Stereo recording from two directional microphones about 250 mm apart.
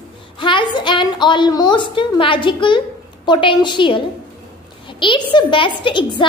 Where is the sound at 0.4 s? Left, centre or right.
Centre.